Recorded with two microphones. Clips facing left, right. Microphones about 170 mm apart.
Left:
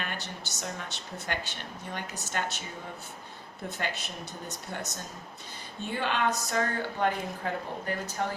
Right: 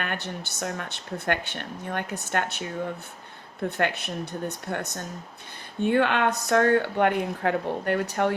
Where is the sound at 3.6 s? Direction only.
60° right (ahead or behind).